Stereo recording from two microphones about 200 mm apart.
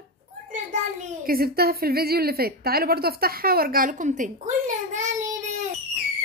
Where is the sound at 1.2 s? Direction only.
50° right (ahead or behind).